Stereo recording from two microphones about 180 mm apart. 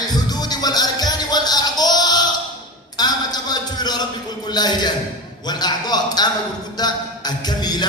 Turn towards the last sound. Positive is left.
turn(degrees=25)  # may be behind; listen again after turning